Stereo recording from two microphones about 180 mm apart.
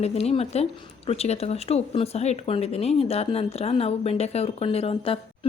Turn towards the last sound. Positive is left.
turn(degrees=30)  # may be behind; listen again after turning